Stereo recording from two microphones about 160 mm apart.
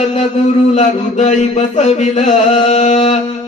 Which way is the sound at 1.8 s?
45° left (ahead or behind).